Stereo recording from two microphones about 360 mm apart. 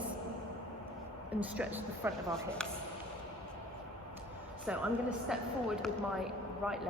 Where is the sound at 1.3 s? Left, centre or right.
Centre.